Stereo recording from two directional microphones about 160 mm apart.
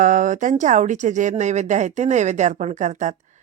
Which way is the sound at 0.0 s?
55° right (ahead or behind).